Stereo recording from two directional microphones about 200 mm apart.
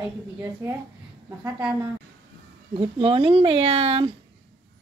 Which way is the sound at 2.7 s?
25° right (ahead or behind).